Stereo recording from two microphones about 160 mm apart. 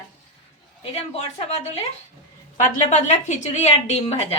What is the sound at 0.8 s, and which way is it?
Speech, 40° left (ahead or behind).